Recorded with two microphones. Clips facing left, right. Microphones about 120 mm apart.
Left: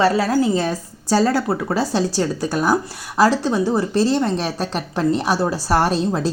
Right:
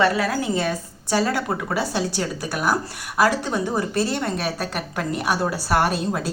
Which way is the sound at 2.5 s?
30° left (ahead or behind).